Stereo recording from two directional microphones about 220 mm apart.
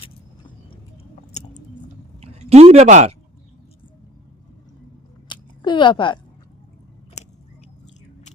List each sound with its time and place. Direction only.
1.4 s chewing: 30° left (ahead or behind)
2.2 s speech: 30° right (ahead or behind)
5.3 s a sound: 20° left (ahead or behind)